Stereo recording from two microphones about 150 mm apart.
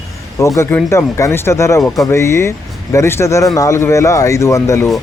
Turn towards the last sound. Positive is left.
turn(degrees=20)  # may be behind; listen again after turning